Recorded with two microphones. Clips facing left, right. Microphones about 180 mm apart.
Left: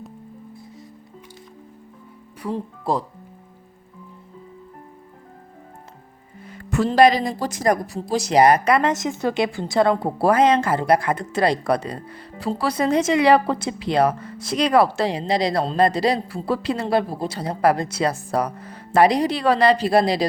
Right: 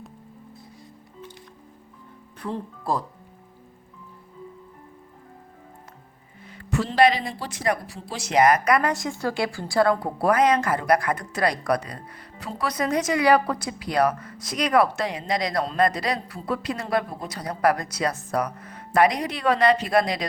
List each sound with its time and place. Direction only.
2.4 s speech: 10° left (ahead or behind)
6.5 s speech: 50° left (ahead or behind); by 20.2 s 30° left (ahead or behind)